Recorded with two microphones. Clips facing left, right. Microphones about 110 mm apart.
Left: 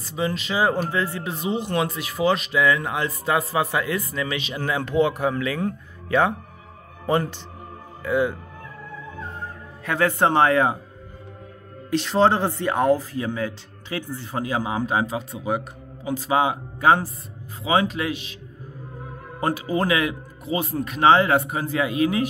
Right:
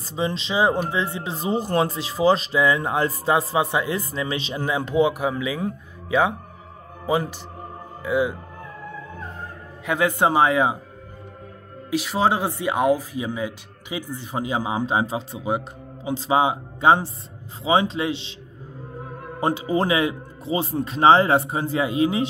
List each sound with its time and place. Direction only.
0.1 s speech: 25° right (ahead or behind)
4.6 s speech: 15° right (ahead or behind)
9.8 s speech: 15° right (ahead or behind)
11.9 s speech: 10° right (ahead or behind); by 18.3 s 25° right (ahead or behind)
19.4 s speech: 25° right (ahead or behind)